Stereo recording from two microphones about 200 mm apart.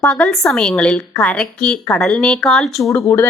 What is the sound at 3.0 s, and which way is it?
Speech, 15° left (ahead or behind).